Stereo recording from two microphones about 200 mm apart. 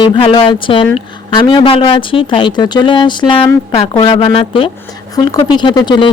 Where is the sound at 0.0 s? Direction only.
25° left (ahead or behind).